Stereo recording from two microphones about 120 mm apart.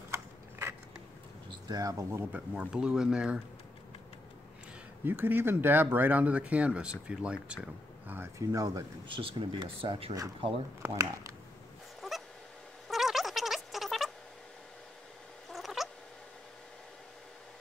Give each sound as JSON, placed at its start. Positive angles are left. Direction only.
{"t": 0.1, "sound": "biting", "side_deg": -20}
{"t": 1.7, "sound": "speech", "side_deg": -30}
{"t": 2.5, "sound": "speech", "side_deg": -5}
{"t": 5.0, "sound": "speech", "side_deg": -15}
{"t": 8.1, "sound": "speech", "side_deg": -25}
{"t": 9.0, "sound": "speech", "side_deg": -45}
{"t": 10.8, "sound": "speech", "side_deg": -25}
{"t": 12.0, "sound": "goose", "side_deg": 0}
{"t": 12.8, "sound": "a sound", "side_deg": 0}
{"t": 15.5, "sound": "cat", "side_deg": 0}